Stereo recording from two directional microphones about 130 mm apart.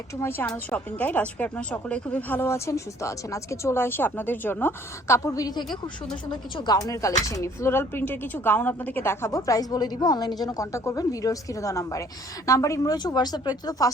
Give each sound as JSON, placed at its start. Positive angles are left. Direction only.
{"t": 0.2, "sound": "speech", "side_deg": 15}